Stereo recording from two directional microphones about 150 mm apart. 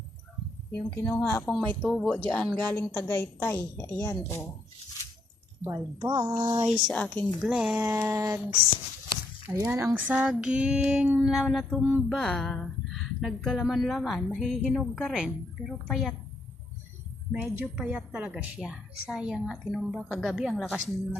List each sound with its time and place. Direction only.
0.7 s a woman's voice: 15° left (ahead or behind)
1.5 s a woman's voice: centre (ahead or behind)
5.6 s speech: 25° right (ahead or behind)
6.7 s speech: centre (ahead or behind)
7.4 s speech: 5° right (ahead or behind)
7.8 s female singing: 15° right (ahead or behind)
9.6 s female singing: 10° right (ahead or behind)
12.0 s speech: centre (ahead or behind)
17.3 s speech: 10° right (ahead or behind)